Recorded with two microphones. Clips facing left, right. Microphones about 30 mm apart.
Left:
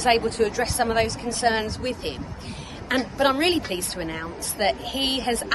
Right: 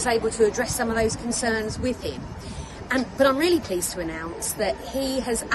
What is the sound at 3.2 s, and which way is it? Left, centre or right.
Speech, centre.